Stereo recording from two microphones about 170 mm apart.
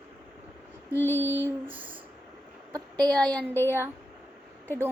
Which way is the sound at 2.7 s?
25° right (ahead or behind).